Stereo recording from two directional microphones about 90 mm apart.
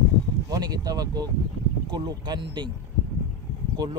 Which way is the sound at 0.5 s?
45° right (ahead or behind).